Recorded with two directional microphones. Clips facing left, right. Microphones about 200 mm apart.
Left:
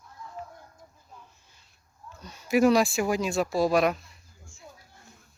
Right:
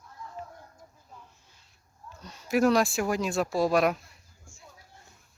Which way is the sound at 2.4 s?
Centre (ahead or behind).